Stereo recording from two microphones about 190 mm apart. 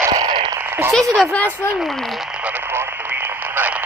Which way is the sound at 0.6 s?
10° right (ahead or behind).